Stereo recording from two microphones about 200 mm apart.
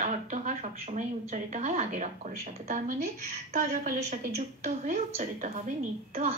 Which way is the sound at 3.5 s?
40° right (ahead or behind).